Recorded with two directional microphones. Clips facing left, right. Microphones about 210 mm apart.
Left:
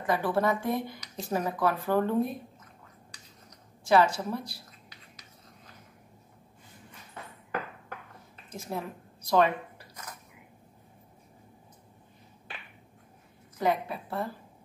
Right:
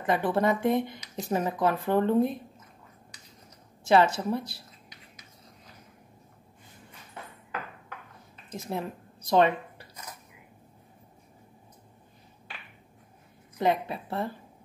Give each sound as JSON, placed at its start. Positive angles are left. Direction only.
{"t": 0.0, "sound": "speech", "side_deg": -25}
{"t": 3.8, "sound": "speech", "side_deg": -25}
{"t": 8.5, "sound": "a woman's voice", "side_deg": -25}
{"t": 13.6, "sound": "speech", "side_deg": -25}